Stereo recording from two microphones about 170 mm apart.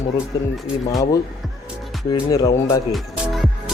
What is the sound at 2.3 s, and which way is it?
Speech, 20° left (ahead or behind).